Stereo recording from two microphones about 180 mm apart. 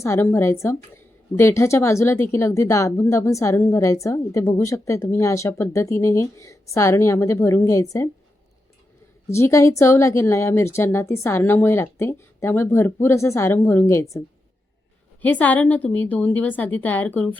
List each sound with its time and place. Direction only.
0.0 s a woman's voice: 15° left (ahead or behind)
9.3 s a woman's voice: 15° left (ahead or behind)
15.2 s a woman's voice: 10° left (ahead or behind)